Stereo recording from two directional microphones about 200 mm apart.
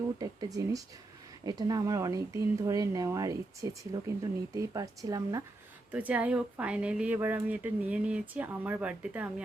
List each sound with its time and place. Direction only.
0.2 s speech: 20° right (ahead or behind)